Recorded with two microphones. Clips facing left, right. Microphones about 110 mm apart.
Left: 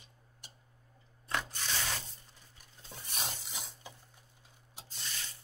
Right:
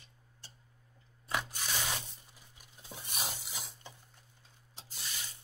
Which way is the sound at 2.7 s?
10° right (ahead or behind).